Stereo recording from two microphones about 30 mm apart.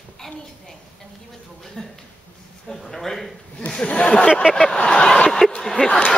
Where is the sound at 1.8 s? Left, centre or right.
Centre.